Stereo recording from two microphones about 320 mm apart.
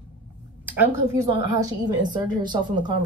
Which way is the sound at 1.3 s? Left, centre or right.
Centre.